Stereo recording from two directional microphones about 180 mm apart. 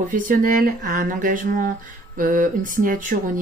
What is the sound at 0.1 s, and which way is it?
Speech, 50° right (ahead or behind).